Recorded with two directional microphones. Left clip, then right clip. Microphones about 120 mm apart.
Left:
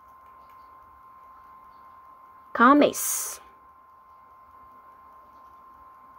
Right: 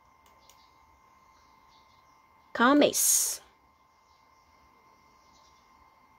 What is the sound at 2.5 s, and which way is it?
Speech, 30° right (ahead or behind).